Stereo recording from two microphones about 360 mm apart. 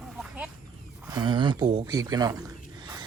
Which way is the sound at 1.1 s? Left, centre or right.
Centre.